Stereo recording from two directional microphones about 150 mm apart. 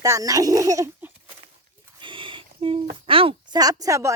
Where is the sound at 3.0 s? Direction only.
35° right (ahead or behind); by 4.1 s 20° right (ahead or behind).